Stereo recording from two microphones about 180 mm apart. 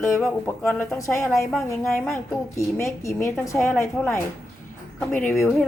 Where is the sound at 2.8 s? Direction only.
15° left (ahead or behind).